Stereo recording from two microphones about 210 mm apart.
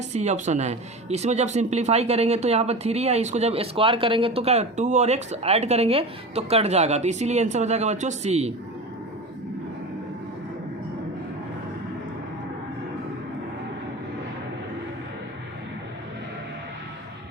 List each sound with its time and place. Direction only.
0.1 s speech: 30° right (ahead or behind)